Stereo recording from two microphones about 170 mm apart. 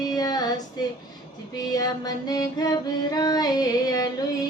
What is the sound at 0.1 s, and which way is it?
Female singing, 25° left (ahead or behind).